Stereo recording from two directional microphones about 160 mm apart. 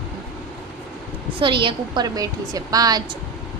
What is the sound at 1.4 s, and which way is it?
A woman's voice, 30° right (ahead or behind).